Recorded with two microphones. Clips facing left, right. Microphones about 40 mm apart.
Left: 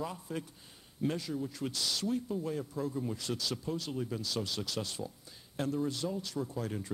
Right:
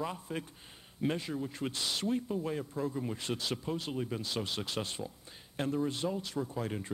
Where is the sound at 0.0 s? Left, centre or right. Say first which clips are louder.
Right 1 dB; right.